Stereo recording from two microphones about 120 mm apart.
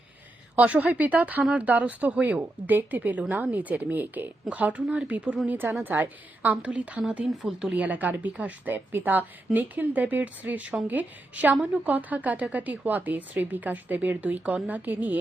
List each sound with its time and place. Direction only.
0.5 s a woman's voice: 10° right (ahead or behind)